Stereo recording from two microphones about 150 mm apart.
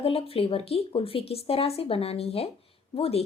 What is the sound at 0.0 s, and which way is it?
Speech, 40° left (ahead or behind).